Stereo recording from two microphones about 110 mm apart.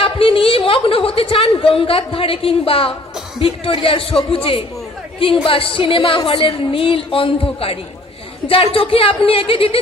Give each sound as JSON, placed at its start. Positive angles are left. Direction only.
{"t": 0.0, "sound": "a woman's voice", "side_deg": 55}